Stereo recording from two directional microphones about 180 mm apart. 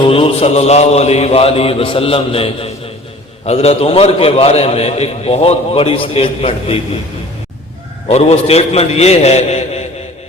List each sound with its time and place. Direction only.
0.1 s a man's voice: 35° left (ahead or behind)
8.0 s a man's voice: 35° left (ahead or behind)